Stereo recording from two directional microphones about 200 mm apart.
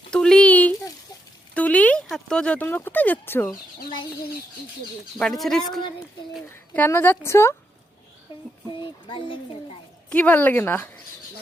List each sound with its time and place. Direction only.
0.1 s a sound: 5° left (ahead or behind)
1.5 s speech: 5° left (ahead or behind)
5.4 s a woman's voice: centre (ahead or behind)
9.0 s a child's voice: 25° left (ahead or behind)
10.1 s speech: 5° left (ahead or behind)